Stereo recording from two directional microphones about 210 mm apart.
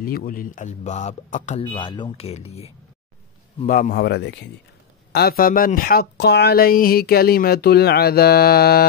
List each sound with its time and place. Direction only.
0.0 s speech: 45° left (ahead or behind)
1.6 s speech: 20° left (ahead or behind)
3.6 s speech: 40° left (ahead or behind)